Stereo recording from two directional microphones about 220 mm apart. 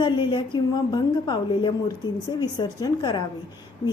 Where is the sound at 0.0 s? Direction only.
20° left (ahead or behind).